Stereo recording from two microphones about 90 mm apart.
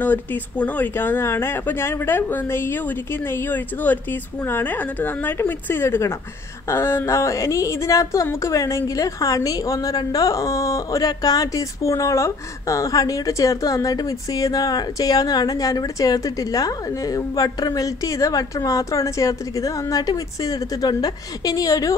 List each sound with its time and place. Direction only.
0.0 s a woman's voice: 20° left (ahead or behind); by 21.9 s 40° left (ahead or behind)